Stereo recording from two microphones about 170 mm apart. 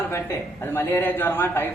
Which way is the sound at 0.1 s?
15° left (ahead or behind).